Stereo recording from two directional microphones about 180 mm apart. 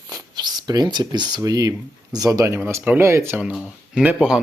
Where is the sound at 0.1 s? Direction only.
25° right (ahead or behind).